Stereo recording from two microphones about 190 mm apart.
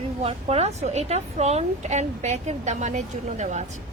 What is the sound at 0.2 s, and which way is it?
A woman's voice, 30° right (ahead or behind).